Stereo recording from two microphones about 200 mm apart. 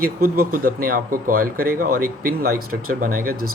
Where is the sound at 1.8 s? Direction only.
90° right.